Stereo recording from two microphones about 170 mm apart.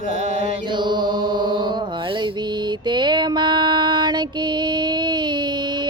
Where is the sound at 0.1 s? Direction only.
40° right (ahead or behind).